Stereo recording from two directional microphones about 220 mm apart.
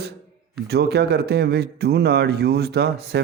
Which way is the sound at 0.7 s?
50° right (ahead or behind).